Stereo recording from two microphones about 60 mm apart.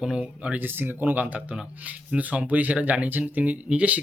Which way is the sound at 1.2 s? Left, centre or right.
Centre.